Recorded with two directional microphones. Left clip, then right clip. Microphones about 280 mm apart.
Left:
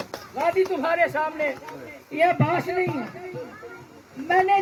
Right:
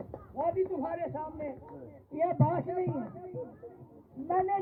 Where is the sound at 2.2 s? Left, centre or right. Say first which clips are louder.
Left 9 dB; centre.